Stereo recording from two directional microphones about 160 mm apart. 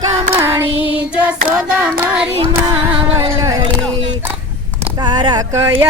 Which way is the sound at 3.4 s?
20° right (ahead or behind).